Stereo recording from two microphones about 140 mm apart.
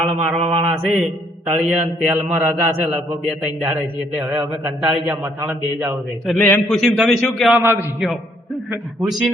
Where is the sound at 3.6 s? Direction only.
25° right (ahead or behind).